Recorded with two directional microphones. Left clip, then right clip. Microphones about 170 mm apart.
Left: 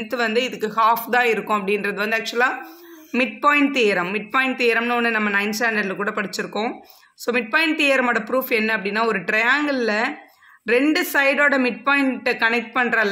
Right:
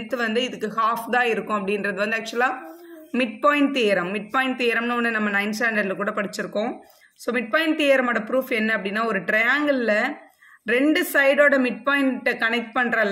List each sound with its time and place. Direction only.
0.1 s speech: 30° left (ahead or behind)